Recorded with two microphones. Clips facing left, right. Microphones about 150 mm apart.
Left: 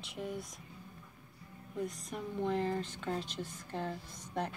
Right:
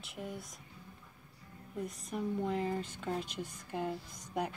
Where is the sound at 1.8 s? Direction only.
Centre (ahead or behind).